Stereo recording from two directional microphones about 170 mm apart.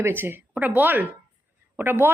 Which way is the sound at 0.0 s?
10° right (ahead or behind).